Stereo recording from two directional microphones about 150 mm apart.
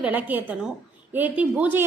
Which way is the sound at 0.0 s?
10° right (ahead or behind).